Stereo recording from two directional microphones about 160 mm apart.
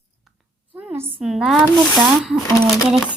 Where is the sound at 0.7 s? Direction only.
15° right (ahead or behind).